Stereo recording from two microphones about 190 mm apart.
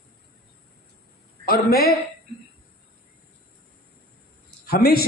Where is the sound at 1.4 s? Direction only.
55° left (ahead or behind).